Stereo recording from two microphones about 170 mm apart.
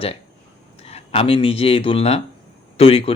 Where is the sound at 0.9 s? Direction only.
35° left (ahead or behind).